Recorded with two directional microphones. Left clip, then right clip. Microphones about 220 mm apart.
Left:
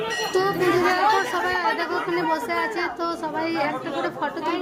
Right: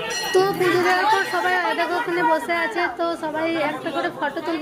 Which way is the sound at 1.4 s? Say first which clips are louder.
Right 2 dB; centre (ahead or behind).